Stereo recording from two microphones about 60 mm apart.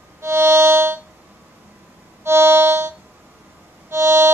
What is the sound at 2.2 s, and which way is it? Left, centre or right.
Music, right.